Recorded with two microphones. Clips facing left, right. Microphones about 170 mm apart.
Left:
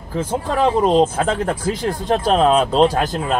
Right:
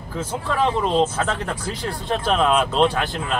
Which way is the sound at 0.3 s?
40° left (ahead or behind).